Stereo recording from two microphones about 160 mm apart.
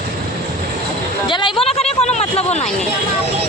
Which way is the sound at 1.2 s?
30° left (ahead or behind).